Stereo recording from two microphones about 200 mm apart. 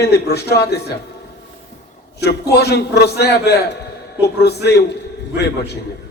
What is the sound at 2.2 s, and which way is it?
A man's voice, 55° left (ahead or behind).